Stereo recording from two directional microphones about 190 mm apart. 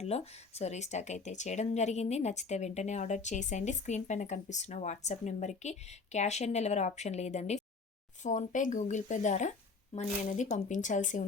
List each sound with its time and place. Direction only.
0.0 s speech: 35° left (ahead or behind)